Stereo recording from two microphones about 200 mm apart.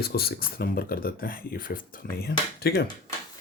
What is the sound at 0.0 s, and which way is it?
Speech, 50° left (ahead or behind).